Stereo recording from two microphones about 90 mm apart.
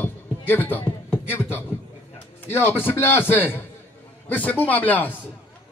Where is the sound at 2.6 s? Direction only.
25° left (ahead or behind).